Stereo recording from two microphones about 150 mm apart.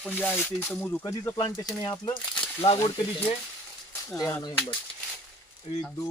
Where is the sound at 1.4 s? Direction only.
25° left (ahead or behind).